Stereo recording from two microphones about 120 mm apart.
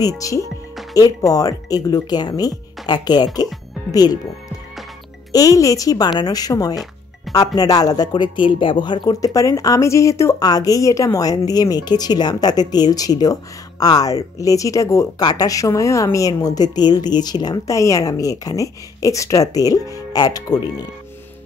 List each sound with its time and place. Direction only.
0.0 s speech: 30° left (ahead or behind)
5.3 s speech: 30° left (ahead or behind)